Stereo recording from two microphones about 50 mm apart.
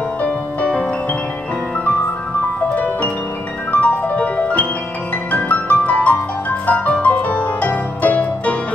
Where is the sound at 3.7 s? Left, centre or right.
Left.